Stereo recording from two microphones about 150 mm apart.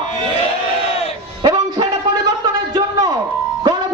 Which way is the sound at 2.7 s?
25° right (ahead or behind).